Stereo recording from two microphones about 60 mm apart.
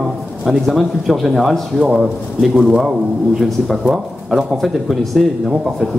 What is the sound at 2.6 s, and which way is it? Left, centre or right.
Speech, centre.